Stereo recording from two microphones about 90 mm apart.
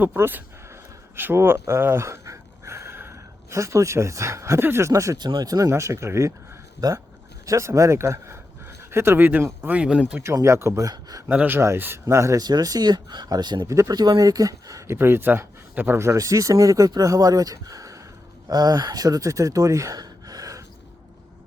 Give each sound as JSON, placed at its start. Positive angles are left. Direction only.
{"t": 0.0, "sound": "speech", "side_deg": -20}
{"t": 5.1, "sound": "speech", "side_deg": -55}
{"t": 6.8, "sound": "speech", "side_deg": -50}
{"t": 7.4, "sound": "speech", "side_deg": -35}
{"t": 10.3, "sound": "speech", "side_deg": -30}
{"t": 11.3, "sound": "speech", "side_deg": -20}
{"t": 12.4, "sound": "speech", "side_deg": -50}
{"t": 13.7, "sound": "speech", "side_deg": -35}
{"t": 14.9, "sound": "speech", "side_deg": -25}